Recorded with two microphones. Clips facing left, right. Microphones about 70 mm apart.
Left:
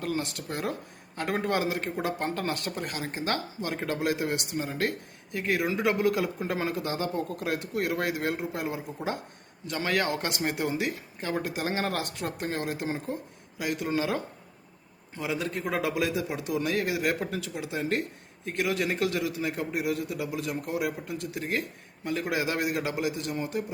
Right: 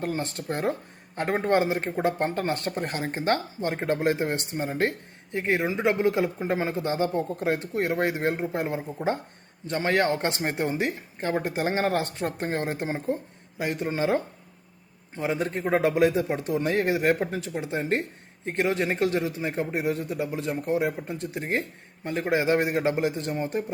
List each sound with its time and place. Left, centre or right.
0.0 s a man's voice: right